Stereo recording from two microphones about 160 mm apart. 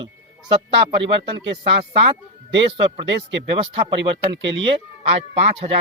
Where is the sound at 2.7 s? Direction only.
40° right (ahead or behind).